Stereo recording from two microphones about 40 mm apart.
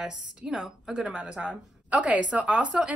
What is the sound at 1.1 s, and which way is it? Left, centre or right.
A woman's voice, right.